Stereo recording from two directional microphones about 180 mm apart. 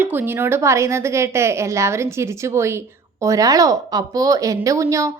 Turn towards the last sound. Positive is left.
turn(degrees=-15)  # may be behind; listen again after turning